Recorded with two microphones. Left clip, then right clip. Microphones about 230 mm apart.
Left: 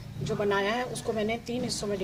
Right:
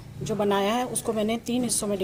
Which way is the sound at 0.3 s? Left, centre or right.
Right.